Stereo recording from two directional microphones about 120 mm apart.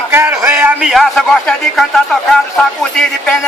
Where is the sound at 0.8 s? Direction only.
Centre (ahead or behind).